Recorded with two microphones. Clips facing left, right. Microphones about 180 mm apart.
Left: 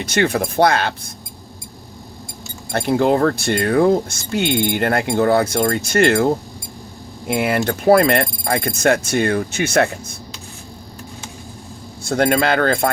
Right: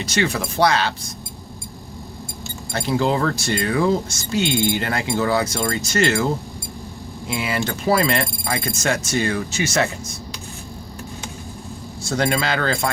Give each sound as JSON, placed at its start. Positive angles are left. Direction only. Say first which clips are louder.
{"t": 0.0, "sound": "speech", "louder": "left 4 dB", "side_deg": 55}
{"t": 2.7, "sound": "speech", "louder": "left 4 dB", "side_deg": 55}
{"t": 12.0, "sound": "speech", "louder": "left 5 dB", "side_deg": 55}